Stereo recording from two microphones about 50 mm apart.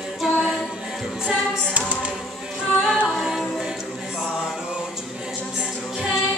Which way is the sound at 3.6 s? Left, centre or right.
Centre.